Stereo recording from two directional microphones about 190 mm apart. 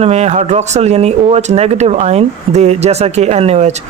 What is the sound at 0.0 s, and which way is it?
Speech, 35° right (ahead or behind).